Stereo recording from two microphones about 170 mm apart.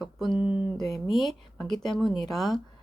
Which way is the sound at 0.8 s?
20° left (ahead or behind).